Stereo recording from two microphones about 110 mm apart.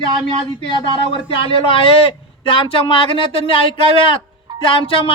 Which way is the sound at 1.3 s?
50° left (ahead or behind).